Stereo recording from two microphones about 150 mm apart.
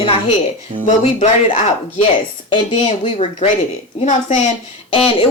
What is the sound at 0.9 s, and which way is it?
Speech, 50° left (ahead or behind).